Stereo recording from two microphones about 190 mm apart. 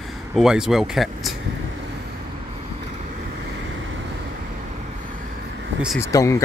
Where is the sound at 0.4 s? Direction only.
5° right (ahead or behind).